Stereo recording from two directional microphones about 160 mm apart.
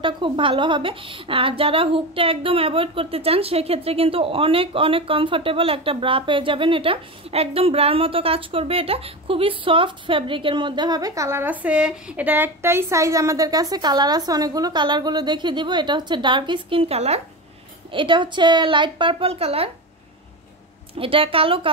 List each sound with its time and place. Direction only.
0.0 s a woman's voice: 30° right (ahead or behind)
21.0 s a woman's voice: 35° right (ahead or behind)